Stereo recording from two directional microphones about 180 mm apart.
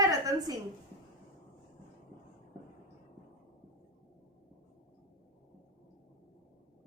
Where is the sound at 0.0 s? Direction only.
20° right (ahead or behind).